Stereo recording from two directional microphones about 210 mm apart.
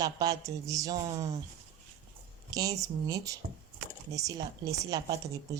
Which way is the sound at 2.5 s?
15° right (ahead or behind).